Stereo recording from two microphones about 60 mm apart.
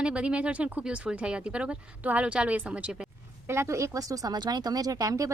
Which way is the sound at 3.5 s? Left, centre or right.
Right.